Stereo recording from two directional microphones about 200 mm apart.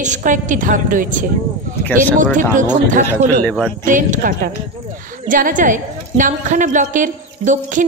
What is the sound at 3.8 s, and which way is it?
A woman's voice, 40° right (ahead or behind).